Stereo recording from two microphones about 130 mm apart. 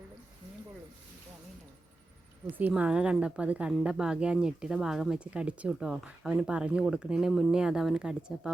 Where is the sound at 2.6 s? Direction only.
10° right (ahead or behind).